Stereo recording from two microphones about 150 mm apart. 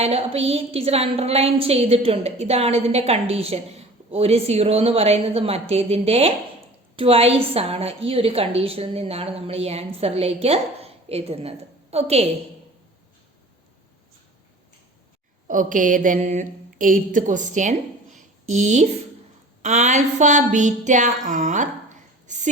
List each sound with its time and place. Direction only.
0.0 s a woman's voice: 45° right (ahead or behind)
15.4 s speech: 60° right (ahead or behind)
19.6 s a sound: 50° right (ahead or behind)